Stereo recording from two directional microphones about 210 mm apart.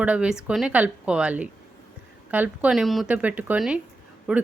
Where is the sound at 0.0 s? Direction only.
5° right (ahead or behind).